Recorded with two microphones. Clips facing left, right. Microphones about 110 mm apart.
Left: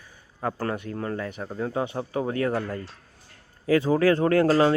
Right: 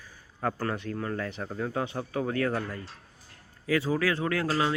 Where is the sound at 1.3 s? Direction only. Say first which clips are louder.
Left 2 dB; 10° left (ahead or behind).